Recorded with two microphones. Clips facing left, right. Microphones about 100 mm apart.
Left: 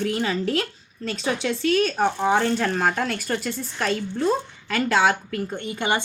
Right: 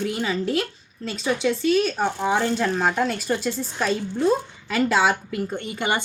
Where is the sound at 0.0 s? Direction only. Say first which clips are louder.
Left 1 dB; 10° right (ahead or behind).